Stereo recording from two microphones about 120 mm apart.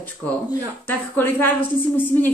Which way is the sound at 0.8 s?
15° left (ahead or behind).